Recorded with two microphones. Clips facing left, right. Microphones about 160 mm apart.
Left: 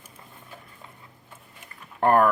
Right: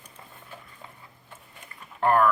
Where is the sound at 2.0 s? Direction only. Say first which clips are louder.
Left 2 dB; 45° left (ahead or behind).